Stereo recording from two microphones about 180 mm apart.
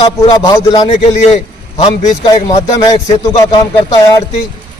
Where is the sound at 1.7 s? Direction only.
40° left (ahead or behind).